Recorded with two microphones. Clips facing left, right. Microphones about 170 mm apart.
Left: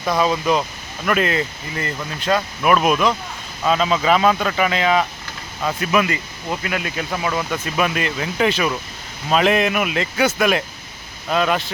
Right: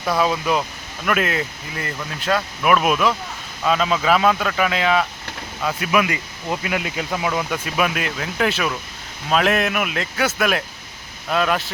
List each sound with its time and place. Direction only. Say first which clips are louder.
0.0 s speech: left 1 dB; 5° right (ahead or behind)
6.5 s speech: even; 15° right (ahead or behind); by 11.7 s centre (ahead or behind)